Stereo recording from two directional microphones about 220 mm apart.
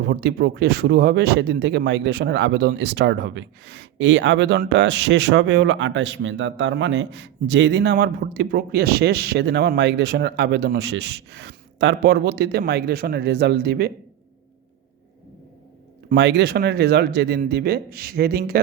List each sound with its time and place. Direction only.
0.1 s speech: 50° right (ahead or behind)
16.0 s speech: 50° right (ahead or behind)